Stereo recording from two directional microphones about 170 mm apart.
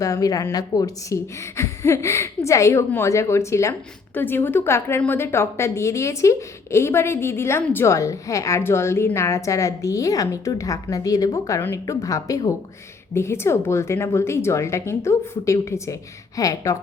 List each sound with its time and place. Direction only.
0.0 s speech: 20° left (ahead or behind)